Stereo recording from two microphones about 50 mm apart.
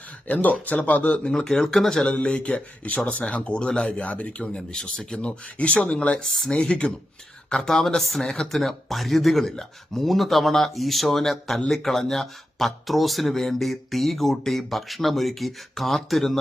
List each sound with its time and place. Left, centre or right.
0.3 s speech: left
1.1 s speech: centre
2.0 s speech: left; by 16.4 s centre